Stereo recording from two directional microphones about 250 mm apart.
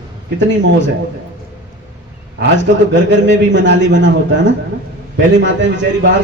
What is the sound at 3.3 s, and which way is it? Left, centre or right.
A man's voice, right.